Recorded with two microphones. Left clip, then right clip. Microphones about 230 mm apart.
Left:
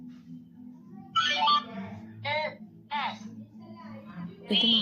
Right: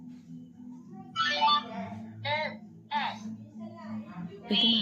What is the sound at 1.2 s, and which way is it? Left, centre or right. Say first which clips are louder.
Music: left 1 dB; centre.